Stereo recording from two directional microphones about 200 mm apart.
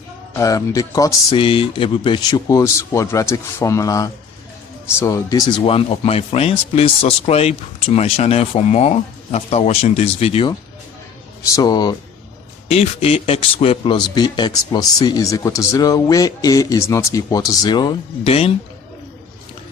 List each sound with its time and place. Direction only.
0.3 s speech: 15° left (ahead or behind)
11.5 s speech: 20° left (ahead or behind)
12.6 s speech: 30° left (ahead or behind)